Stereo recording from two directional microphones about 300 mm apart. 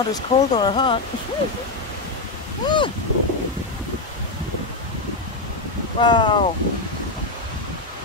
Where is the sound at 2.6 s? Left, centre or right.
Centre.